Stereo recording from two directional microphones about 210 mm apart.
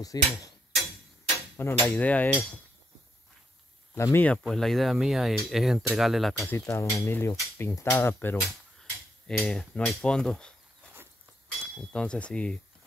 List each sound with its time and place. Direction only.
0.0 s hammer: 15° left (ahead or behind)
1.6 s hammer: 10° left (ahead or behind)
3.9 s speech: 10° left (ahead or behind)
6.5 s hammer: 10° left (ahead or behind)
9.4 s speech: 5° left (ahead or behind)
11.6 s speech: 5° left (ahead or behind)